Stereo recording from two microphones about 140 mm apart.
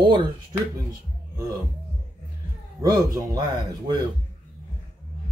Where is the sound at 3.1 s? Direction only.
25° right (ahead or behind).